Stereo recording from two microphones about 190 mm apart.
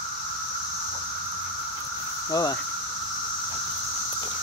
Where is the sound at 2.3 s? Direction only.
20° left (ahead or behind).